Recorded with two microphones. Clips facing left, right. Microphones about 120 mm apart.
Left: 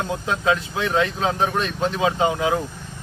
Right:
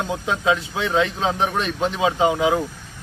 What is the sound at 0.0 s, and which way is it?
Speech, 20° right (ahead or behind).